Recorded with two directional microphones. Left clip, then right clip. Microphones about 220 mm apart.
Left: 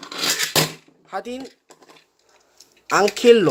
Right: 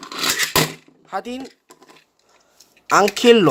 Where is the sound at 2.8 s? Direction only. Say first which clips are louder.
Right 1 dB; 10° right (ahead or behind).